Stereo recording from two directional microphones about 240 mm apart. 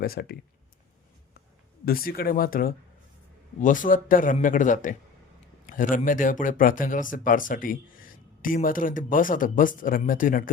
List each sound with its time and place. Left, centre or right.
0.0 s a man's voice: left
1.8 s a man's voice: left